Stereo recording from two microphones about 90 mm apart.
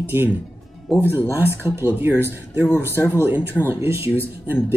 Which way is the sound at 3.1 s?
20° right (ahead or behind).